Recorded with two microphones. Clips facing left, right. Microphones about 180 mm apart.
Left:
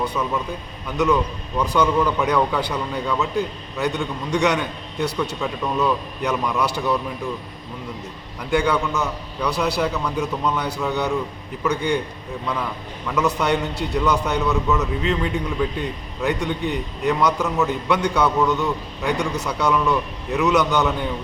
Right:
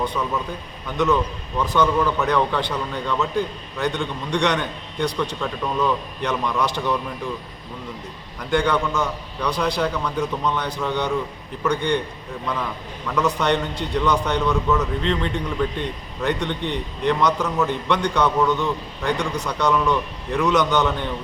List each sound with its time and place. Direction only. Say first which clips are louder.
0.0 s a man's voice: left 1 dB; 5° left (ahead or behind)
8.4 s a man's voice: even; 5° left (ahead or behind)
13.1 s a man's voice: even; 5° left (ahead or behind)